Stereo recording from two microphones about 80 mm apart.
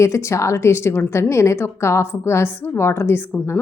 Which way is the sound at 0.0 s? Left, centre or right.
Left.